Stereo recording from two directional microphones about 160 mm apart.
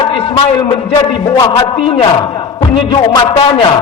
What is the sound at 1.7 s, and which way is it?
A man's voice, 35° left (ahead or behind).